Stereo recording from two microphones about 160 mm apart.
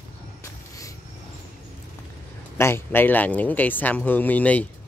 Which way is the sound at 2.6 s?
15° left (ahead or behind).